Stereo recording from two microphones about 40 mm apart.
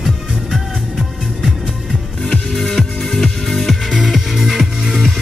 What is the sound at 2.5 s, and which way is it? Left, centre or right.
Music, centre.